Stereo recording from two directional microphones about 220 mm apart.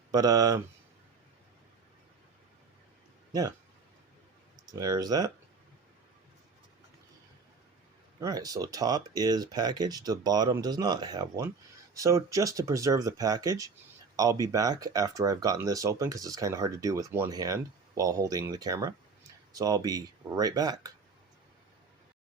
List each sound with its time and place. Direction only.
0.1 s speech: 15° right (ahead or behind)
4.6 s speech: 15° right (ahead or behind)
8.2 s speech: 15° right (ahead or behind)